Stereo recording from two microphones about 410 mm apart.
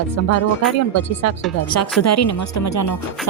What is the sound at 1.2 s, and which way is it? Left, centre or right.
Speech, left.